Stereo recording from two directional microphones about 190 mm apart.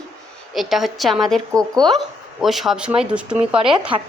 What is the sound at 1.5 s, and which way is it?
Speech, 20° right (ahead or behind).